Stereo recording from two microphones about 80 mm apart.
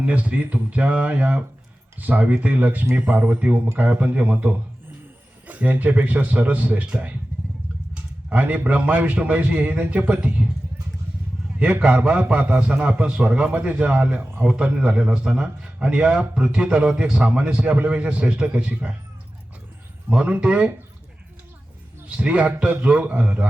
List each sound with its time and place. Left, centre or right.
0.0 s a man's voice: centre
8.3 s a man's voice: centre
11.6 s a man's voice: centre
20.1 s a man's voice: centre
22.1 s a man's voice: centre